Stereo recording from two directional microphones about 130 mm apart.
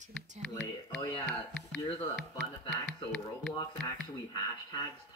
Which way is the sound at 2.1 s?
5° left (ahead or behind).